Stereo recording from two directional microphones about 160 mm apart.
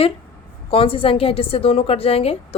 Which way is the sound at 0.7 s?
35° left (ahead or behind).